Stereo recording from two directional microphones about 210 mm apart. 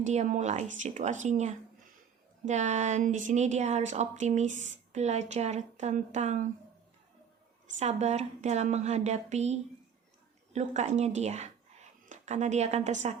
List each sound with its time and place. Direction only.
0.0 s speech: 35° right (ahead or behind)
7.8 s a woman's voice: 30° right (ahead or behind)